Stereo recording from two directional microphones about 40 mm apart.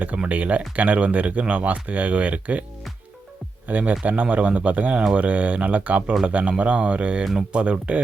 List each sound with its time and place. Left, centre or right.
0.2 s speech: right
3.7 s speech: right